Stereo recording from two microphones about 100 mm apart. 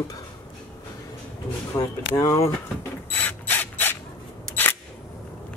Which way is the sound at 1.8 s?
35° left (ahead or behind).